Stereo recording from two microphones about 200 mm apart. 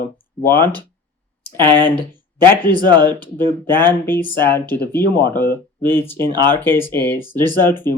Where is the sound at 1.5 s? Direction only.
20° right (ahead or behind).